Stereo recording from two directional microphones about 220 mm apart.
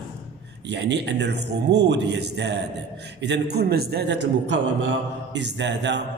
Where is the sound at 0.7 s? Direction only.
50° right (ahead or behind).